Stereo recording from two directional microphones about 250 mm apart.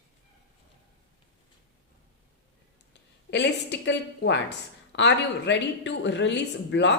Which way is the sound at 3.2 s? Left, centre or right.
Left.